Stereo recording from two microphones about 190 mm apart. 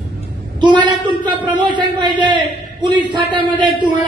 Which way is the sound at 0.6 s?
25° right (ahead or behind).